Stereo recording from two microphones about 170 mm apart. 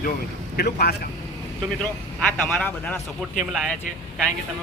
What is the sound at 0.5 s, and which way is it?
Speech, 70° left (ahead or behind).